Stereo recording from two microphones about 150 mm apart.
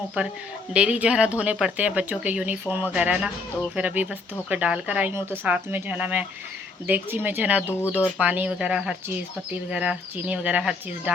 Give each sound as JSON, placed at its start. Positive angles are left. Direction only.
{"t": 0.2, "sound": "speech", "side_deg": -10}
{"t": 7.7, "sound": "speech", "side_deg": 15}
{"t": 8.2, "sound": "speech", "side_deg": -10}